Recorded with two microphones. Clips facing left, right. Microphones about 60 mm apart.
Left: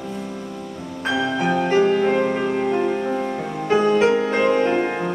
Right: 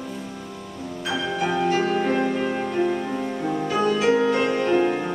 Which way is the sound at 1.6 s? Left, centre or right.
Left.